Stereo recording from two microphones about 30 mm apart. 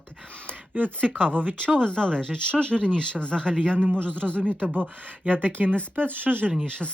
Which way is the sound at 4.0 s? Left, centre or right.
Left.